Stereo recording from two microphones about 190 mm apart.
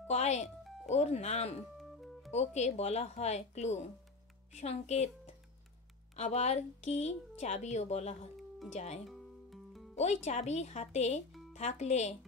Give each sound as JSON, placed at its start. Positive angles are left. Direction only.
{"t": 0.1, "sound": "speech", "side_deg": 35}
{"t": 1.8, "sound": "music", "side_deg": 0}
{"t": 2.3, "sound": "speech", "side_deg": 35}
{"t": 9.0, "sound": "music", "side_deg": 0}
{"t": 9.9, "sound": "speech", "side_deg": 35}